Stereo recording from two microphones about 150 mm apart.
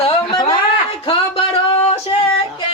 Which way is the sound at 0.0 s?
35° left (ahead or behind).